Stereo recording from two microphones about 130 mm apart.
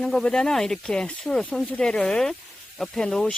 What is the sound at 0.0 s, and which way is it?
Speech, 5° left (ahead or behind).